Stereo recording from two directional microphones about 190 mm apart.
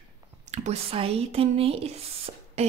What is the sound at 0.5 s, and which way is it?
A woman's voice, 35° right (ahead or behind).